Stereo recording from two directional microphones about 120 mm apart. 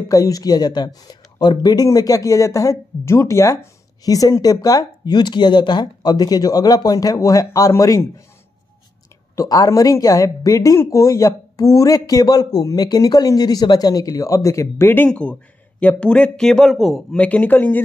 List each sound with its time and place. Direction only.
0.1 s speech: 30° left (ahead or behind)
9.3 s speech: 30° left (ahead or behind)
15.0 s speech: 10° left (ahead or behind)
17.2 s speech: 10° left (ahead or behind)